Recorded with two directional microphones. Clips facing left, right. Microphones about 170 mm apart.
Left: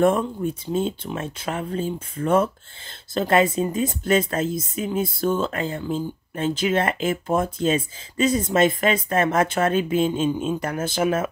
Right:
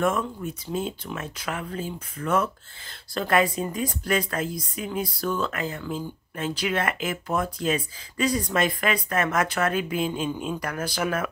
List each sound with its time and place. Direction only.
0.0 s speech: 30° left (ahead or behind)